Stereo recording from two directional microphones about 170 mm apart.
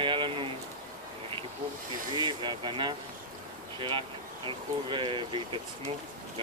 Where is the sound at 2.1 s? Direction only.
25° right (ahead or behind).